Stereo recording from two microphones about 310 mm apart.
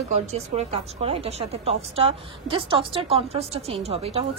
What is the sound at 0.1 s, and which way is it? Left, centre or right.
A woman's voice, right.